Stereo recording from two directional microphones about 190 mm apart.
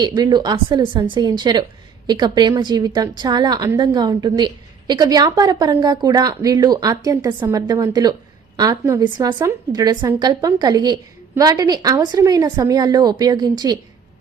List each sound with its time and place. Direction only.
0.0 s a woman's voice: 25° right (ahead or behind)